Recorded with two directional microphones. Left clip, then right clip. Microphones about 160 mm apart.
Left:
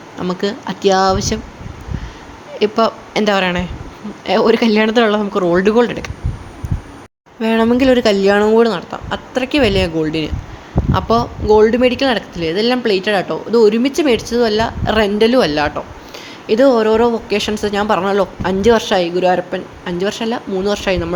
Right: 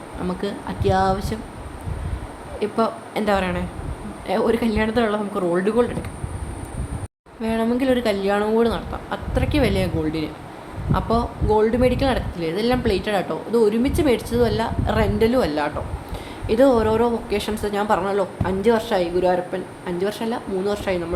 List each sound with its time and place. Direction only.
0.3 s speech: 45° left (ahead or behind)
2.6 s speech: 50° left (ahead or behind)
7.4 s speech: 50° left (ahead or behind)
8.4 s speech: 50° left (ahead or behind)
16.5 s speech: 30° left (ahead or behind)